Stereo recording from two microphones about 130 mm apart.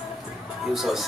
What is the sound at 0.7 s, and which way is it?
Speech, centre (ahead or behind).